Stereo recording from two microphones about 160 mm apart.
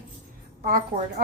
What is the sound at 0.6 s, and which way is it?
Speech, 60° right (ahead or behind).